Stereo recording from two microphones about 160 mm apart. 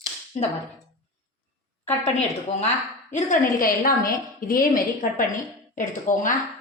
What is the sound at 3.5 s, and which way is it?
A woman's voice, 60° left (ahead or behind).